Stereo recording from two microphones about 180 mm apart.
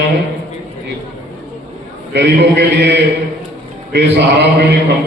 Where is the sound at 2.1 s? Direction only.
70° right (ahead or behind).